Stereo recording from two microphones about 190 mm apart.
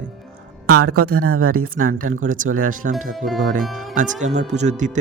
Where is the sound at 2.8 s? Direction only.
60° right (ahead or behind).